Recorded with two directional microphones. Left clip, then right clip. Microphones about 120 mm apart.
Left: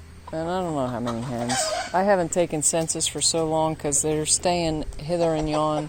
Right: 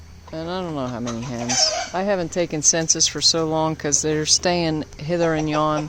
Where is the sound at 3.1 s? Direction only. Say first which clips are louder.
Right 4 dB; 25° right (ahead or behind).